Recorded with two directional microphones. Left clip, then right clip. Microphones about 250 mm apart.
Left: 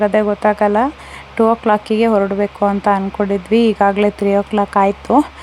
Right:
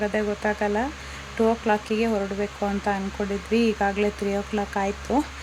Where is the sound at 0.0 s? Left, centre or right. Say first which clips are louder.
Left 11 dB; left.